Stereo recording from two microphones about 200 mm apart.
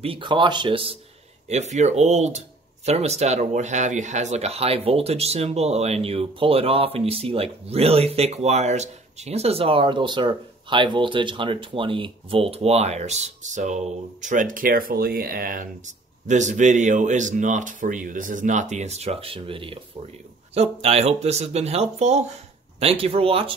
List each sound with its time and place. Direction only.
0.0 s speech: 25° right (ahead or behind)